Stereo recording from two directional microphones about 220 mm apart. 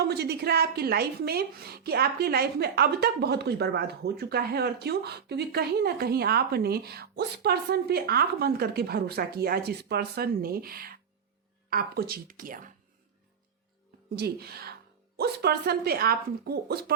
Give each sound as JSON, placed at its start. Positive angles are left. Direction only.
{"t": 0.0, "sound": "a woman's voice", "side_deg": -50}
{"t": 14.2, "sound": "a woman's voice", "side_deg": -45}